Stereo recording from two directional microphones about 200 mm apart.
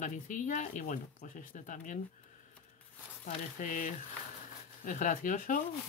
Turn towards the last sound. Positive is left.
turn(degrees=40)  # may be behind; listen again after turning